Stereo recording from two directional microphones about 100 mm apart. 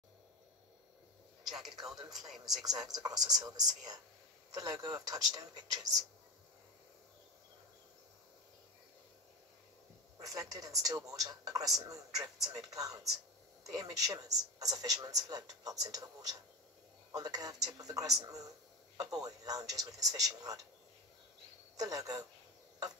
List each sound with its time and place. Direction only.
1.4 s a man's voice: centre (ahead or behind)
2.6 s speech: 40° right (ahead or behind)
10.1 s speech: 40° right (ahead or behind)
21.7 s speech: 40° right (ahead or behind)